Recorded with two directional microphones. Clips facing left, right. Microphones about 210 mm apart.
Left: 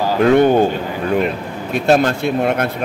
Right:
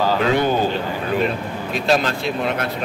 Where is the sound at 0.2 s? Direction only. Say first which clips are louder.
Left 7 dB; 55° left (ahead or behind).